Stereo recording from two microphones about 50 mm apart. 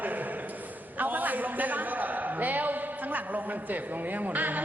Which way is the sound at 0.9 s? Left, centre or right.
Right.